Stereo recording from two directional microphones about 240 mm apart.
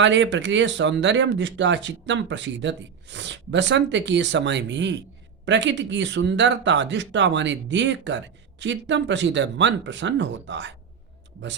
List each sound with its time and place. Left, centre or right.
0.0 s speech: right